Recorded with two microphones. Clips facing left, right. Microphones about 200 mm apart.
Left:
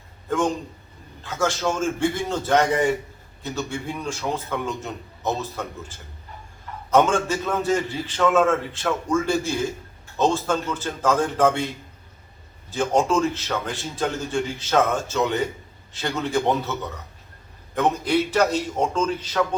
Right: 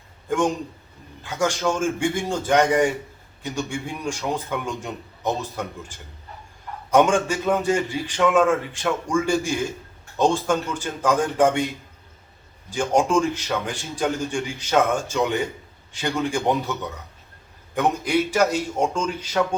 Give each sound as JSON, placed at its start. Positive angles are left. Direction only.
{"t": 1.2, "sound": "a man's voice", "side_deg": -15}
{"t": 12.7, "sound": "a man's voice", "side_deg": -15}
{"t": 17.7, "sound": "a man's voice", "side_deg": -10}